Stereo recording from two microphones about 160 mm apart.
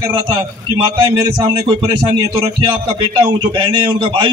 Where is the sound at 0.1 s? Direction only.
30° right (ahead or behind).